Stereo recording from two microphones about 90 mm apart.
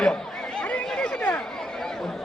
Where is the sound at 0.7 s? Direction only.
15° left (ahead or behind).